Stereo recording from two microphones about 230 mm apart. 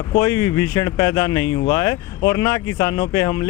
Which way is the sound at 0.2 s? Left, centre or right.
Centre.